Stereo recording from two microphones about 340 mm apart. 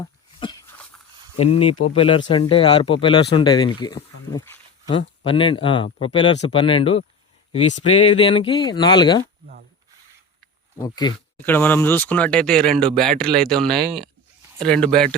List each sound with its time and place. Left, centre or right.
0.0 s a sound: centre
1.4 s speech: centre
10.8 s speech: centre